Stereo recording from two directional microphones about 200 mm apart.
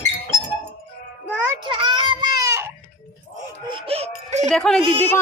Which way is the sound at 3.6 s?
25° right (ahead or behind).